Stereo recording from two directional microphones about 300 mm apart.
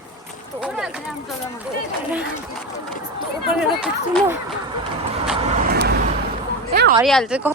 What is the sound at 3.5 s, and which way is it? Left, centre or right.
Speech, centre.